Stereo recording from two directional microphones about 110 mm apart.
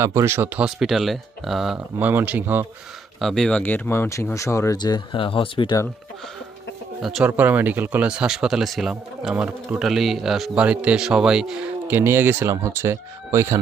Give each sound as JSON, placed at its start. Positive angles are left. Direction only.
{"t": 0.0, "sound": "speech", "side_deg": -25}
{"t": 0.6, "sound": "speech", "side_deg": -5}
{"t": 2.0, "sound": "speech", "side_deg": -15}
{"t": 3.2, "sound": "speech", "side_deg": 0}
{"t": 3.6, "sound": "speech", "side_deg": 20}
{"t": 4.8, "sound": "speech", "side_deg": 40}
{"t": 7.0, "sound": "speech", "side_deg": 0}
{"t": 7.3, "sound": "speech", "side_deg": -15}
{"t": 11.9, "sound": "speech", "side_deg": -20}